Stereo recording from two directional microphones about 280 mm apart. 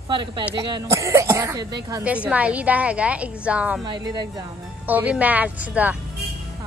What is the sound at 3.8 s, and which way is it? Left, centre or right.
Speech, centre.